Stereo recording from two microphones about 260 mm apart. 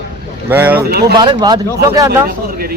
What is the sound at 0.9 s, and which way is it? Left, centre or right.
Speech, right.